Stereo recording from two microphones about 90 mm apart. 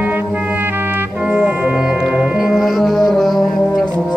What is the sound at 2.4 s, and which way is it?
Music, 5° right (ahead or behind).